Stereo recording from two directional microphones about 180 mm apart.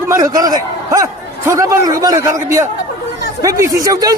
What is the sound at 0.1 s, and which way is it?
A man's voice, 20° right (ahead or behind).